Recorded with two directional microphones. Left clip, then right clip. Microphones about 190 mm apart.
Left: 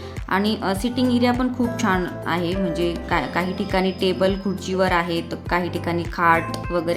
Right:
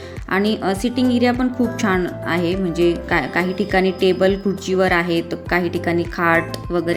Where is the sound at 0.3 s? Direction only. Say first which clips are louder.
Right 3 dB; 10° right (ahead or behind).